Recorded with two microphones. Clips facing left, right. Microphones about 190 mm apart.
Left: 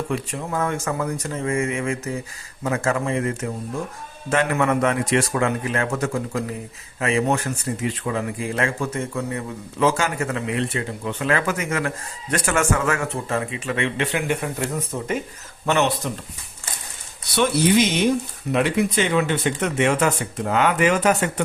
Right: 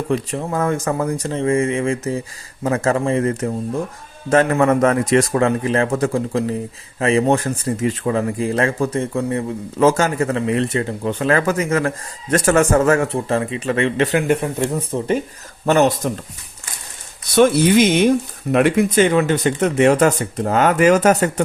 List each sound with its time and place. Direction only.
0.1 s speech: 35° right (ahead or behind)
17.3 s speech: 50° right (ahead or behind)